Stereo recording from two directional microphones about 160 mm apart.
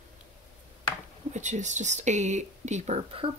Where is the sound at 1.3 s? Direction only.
50° right (ahead or behind).